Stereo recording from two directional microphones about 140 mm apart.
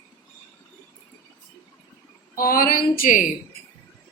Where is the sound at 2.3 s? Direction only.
85° left.